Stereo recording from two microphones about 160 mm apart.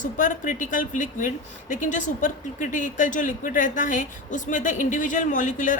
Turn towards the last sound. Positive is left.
turn(degrees=55)  # may be behind; listen again after turning